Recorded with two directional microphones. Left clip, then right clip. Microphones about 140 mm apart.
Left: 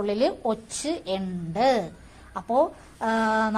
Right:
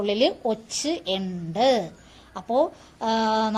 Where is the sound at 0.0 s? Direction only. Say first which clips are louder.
Right 2 dB; 20° right (ahead or behind).